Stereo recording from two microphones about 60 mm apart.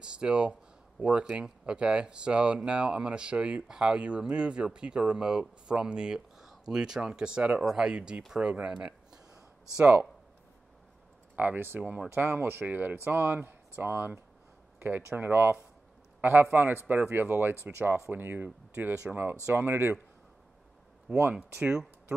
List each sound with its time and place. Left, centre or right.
0.0 s speech: centre
11.3 s speech: right
11.8 s speech: centre
12.1 s a man's voice: right